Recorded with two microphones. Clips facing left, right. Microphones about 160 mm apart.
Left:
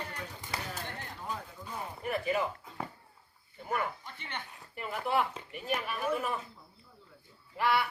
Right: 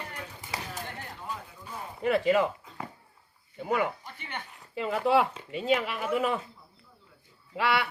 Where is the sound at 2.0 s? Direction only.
90° right.